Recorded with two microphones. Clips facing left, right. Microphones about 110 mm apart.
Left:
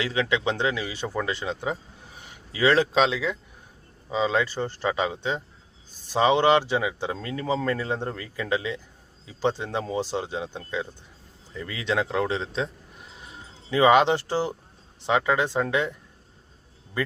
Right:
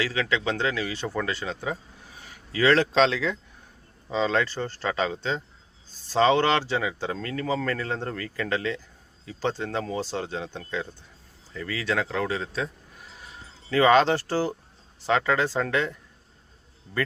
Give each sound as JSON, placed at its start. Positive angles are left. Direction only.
{"t": 0.0, "sound": "a man's voice", "side_deg": 25}